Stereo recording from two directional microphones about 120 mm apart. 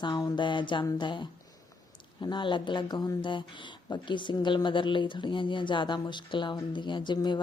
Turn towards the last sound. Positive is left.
turn(degrees=40)  # may be behind; listen again after turning